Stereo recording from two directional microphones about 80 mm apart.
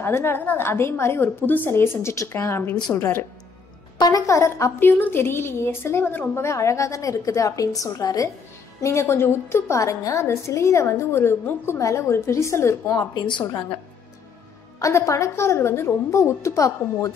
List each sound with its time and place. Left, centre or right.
0.0 s a woman's voice: left
4.3 s a woman's voice: left
4.7 s a woman's voice: left
8.8 s a woman's voice: left
13.1 s a woman's voice: left
14.8 s a woman's voice: left